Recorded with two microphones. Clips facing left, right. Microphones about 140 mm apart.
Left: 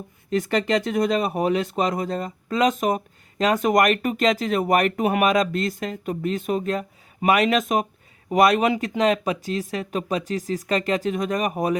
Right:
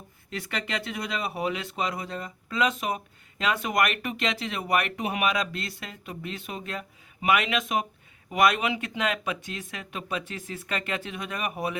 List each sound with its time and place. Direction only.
0.3 s speech: 40° left (ahead or behind)